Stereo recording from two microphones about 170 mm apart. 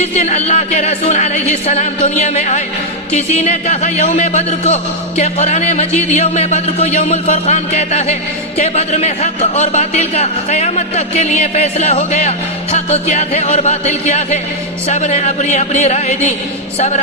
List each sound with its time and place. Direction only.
0.0 s a man's voice: 40° left (ahead or behind)